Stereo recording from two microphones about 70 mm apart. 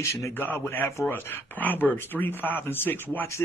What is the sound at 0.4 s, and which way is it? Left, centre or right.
Speech, left.